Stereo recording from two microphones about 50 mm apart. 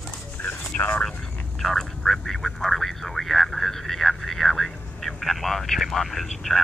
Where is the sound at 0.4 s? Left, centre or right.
Left.